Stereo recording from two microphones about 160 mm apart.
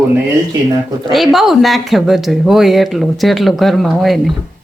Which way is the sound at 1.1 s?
Centre (ahead or behind).